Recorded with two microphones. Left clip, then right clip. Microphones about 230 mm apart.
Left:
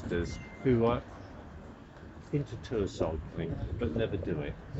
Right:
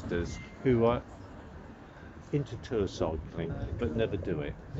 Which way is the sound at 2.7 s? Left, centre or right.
Centre.